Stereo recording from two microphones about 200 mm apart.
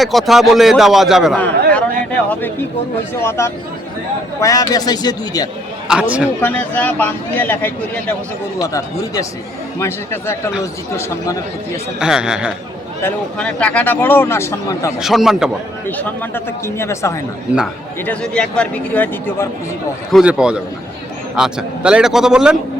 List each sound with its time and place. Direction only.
0.0 s a man's voice: centre (ahead or behind)
3.2 s a man's voice: 15° left (ahead or behind)
5.9 s a man's voice: 5° right (ahead or behind)
6.4 s speech: 10° left (ahead or behind)
11.9 s a man's voice: 5° right (ahead or behind)
13.0 s speech: 10° left (ahead or behind)
14.9 s a man's voice: centre (ahead or behind)
15.9 s a man's voice: 10° left (ahead or behind)